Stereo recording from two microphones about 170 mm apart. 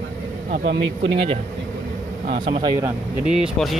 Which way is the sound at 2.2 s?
55° right (ahead or behind).